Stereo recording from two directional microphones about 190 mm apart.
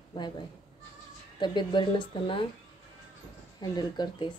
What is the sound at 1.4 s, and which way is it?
A woman's voice, 25° left (ahead or behind).